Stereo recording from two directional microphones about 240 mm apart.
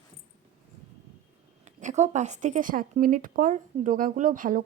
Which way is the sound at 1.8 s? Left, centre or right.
Right.